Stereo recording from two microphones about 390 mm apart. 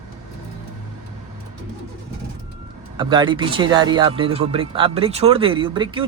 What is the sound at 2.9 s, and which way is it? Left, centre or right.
Speech, centre.